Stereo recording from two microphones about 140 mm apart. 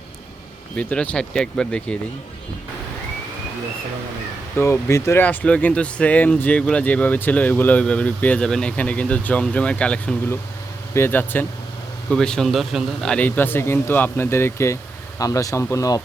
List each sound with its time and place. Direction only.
0.8 s speech: 10° left (ahead or behind)
4.5 s speech: 15° left (ahead or behind)